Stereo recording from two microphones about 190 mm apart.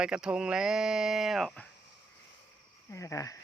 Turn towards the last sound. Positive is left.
turn(degrees=15)  # may be behind; listen again after turning